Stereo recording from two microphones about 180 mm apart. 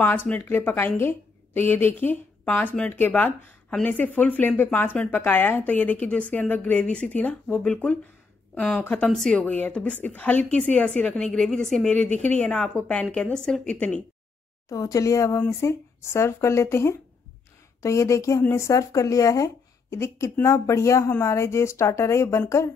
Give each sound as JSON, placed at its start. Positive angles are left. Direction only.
{"t": 0.0, "sound": "a woman's voice", "side_deg": 10}
{"t": 14.7, "sound": "a woman's voice", "side_deg": 20}